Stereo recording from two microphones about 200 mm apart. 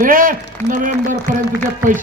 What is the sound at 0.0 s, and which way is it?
Speech, 45° right (ahead or behind).